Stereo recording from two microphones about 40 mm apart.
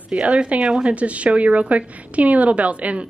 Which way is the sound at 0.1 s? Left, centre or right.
Right.